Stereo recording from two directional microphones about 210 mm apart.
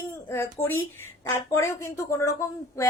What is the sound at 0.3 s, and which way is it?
A woman's voice, 10° left (ahead or behind).